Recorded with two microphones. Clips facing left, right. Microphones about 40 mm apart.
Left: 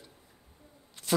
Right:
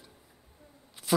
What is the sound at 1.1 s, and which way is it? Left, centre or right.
Speech, centre.